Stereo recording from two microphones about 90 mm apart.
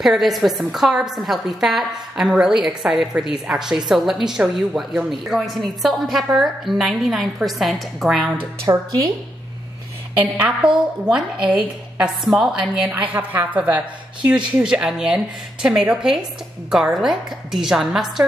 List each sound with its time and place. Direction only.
0.0 s a woman's voice: centre (ahead or behind)
8.7 s speech: 45° right (ahead or behind)
10.6 s a woman's voice: 65° right (ahead or behind)
11.1 s speech: 10° right (ahead or behind)
12.9 s a woman's voice: 20° right (ahead or behind); by 18.2 s 5° right (ahead or behind)